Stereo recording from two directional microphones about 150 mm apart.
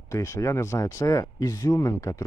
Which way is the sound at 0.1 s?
20° left (ahead or behind).